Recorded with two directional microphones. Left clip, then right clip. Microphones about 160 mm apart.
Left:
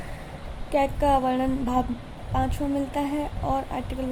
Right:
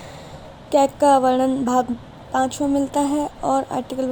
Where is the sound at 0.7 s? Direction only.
45° right (ahead or behind).